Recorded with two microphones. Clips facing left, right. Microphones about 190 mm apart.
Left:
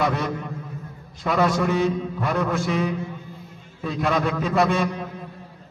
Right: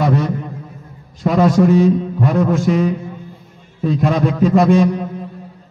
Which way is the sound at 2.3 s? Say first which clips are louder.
Right 8 dB; 20° right (ahead or behind).